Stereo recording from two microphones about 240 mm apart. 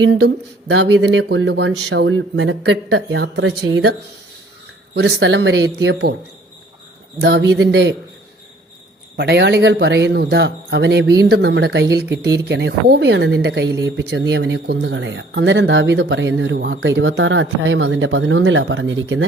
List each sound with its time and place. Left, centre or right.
0.7 s speech: right
4.9 s speech: right
7.2 s speech: right
9.1 s speech: right